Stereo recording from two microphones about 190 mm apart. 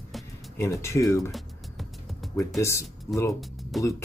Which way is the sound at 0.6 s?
15° left (ahead or behind).